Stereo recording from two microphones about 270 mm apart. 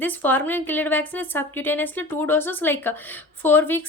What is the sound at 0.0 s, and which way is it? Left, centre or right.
A woman's voice, centre.